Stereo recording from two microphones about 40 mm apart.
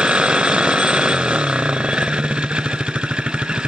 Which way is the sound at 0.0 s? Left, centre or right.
Right.